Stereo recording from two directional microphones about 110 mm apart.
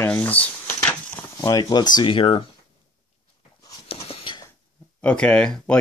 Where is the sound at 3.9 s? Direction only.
60° left (ahead or behind).